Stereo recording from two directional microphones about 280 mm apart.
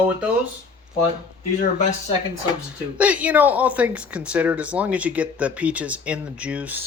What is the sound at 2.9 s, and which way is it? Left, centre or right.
Speech, centre.